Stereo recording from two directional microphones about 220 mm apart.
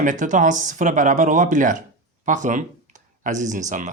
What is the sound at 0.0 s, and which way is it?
Speech, 35° right (ahead or behind).